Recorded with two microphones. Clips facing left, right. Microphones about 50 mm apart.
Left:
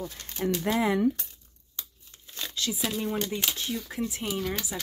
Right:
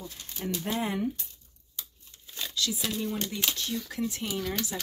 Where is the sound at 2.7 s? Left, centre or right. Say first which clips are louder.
Left 2 dB; centre.